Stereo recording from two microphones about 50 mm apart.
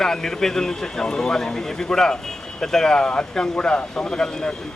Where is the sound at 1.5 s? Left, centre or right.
Centre.